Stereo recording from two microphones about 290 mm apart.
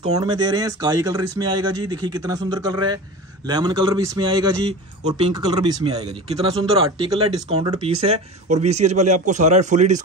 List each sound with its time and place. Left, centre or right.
0.0 s a man's voice: centre